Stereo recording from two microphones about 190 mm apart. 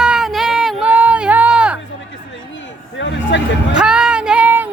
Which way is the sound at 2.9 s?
75° left (ahead or behind).